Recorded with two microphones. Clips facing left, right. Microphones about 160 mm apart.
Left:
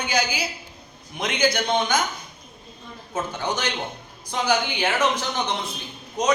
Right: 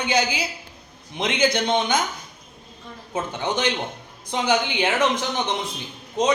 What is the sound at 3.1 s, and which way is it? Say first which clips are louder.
A man's voice: right 2 dB; 20° right (ahead or behind).